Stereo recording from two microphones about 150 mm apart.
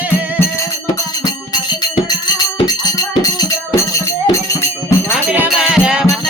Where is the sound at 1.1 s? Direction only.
25° left (ahead or behind).